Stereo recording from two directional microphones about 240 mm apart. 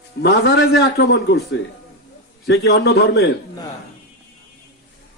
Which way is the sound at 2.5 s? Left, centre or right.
Left.